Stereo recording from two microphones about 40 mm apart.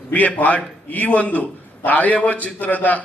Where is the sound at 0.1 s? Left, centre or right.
Left.